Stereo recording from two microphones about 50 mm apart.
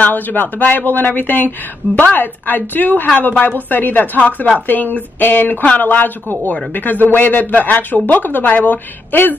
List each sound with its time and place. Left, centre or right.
0.0 s speech: left